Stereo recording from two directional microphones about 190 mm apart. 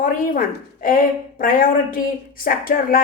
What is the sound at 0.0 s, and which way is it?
A woman's voice, 45° left (ahead or behind).